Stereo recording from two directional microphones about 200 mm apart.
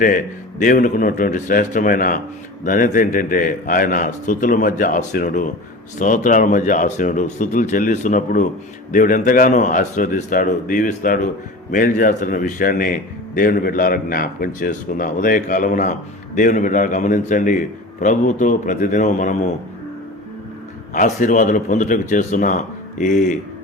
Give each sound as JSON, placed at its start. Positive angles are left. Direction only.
{"t": 0.6, "sound": "a man's voice", "side_deg": 40}
{"t": 20.9, "sound": "a man's voice", "side_deg": 40}